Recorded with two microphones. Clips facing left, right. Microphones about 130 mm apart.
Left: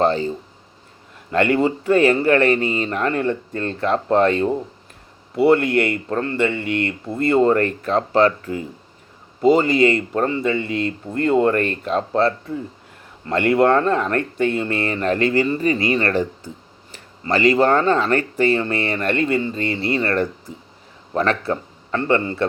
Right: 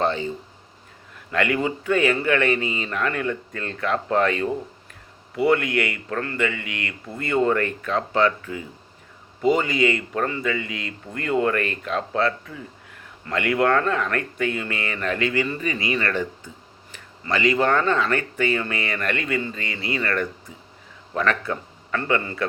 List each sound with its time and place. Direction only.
0.0 s speech: 35° left (ahead or behind)